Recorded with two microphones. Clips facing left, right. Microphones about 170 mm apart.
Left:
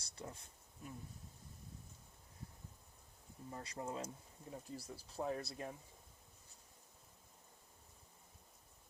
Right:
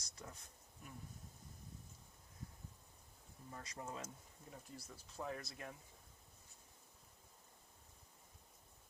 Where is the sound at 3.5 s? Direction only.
30° left (ahead or behind).